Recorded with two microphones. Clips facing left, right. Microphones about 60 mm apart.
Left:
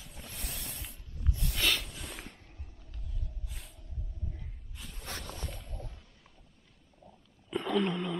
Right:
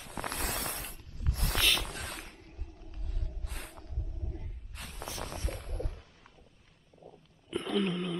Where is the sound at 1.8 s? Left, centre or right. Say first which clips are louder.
Right 4 dB; right.